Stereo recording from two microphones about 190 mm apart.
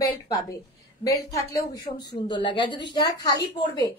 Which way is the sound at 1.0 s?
20° left (ahead or behind).